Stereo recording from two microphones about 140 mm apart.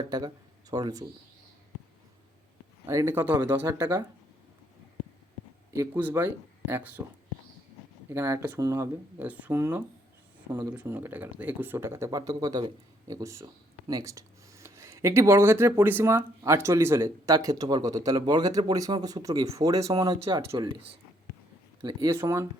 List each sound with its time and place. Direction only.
0.7 s speech: 25° right (ahead or behind)
2.8 s speech: 20° right (ahead or behind)
5.7 s speech: 20° right (ahead or behind)
8.1 s speech: 20° right (ahead or behind)
10.8 s speech: 15° right (ahead or behind)
21.8 s speech: 30° right (ahead or behind)
22.1 s speech: 20° right (ahead or behind)